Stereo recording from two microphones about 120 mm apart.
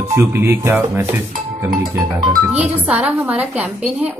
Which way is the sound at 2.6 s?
10° right (ahead or behind).